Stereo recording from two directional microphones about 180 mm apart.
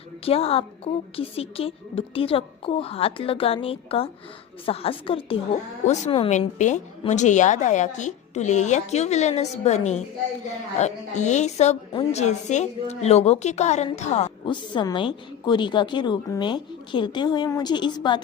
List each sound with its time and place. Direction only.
0.3 s a woman's voice: 35° left (ahead or behind)